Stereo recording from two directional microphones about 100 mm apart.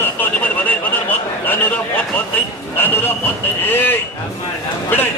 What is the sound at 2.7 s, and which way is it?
Speech, 20° left (ahead or behind).